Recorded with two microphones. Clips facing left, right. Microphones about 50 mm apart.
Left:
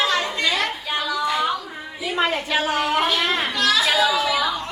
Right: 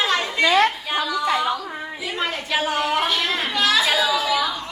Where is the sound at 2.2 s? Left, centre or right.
Left.